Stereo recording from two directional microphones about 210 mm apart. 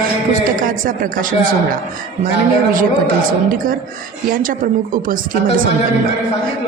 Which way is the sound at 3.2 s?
40° right (ahead or behind).